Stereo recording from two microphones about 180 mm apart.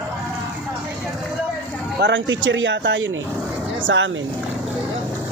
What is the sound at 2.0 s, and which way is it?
Speech, 85° right.